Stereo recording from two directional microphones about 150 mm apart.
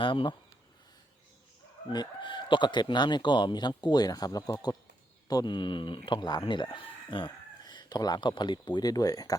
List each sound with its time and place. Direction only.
0.0 s speech: 35° left (ahead or behind)
1.9 s speech: 30° left (ahead or behind)